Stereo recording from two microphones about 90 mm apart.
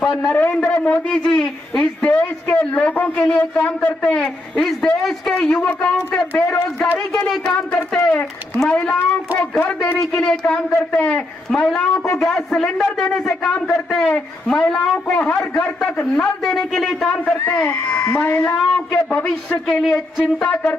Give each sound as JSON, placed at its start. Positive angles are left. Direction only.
{"t": 0.1, "sound": "a man's voice", "side_deg": 5}
{"t": 0.4, "sound": "a man's voice", "side_deg": 15}
{"t": 11.7, "sound": "a man's voice", "side_deg": 5}
{"t": 17.6, "sound": "a man's voice", "side_deg": 15}